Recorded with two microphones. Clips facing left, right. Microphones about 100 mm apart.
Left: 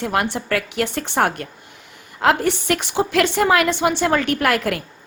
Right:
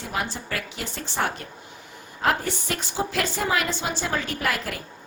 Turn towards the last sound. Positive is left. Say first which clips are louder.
# left 8 dB
turn(degrees=70)  # may be behind; listen again after turning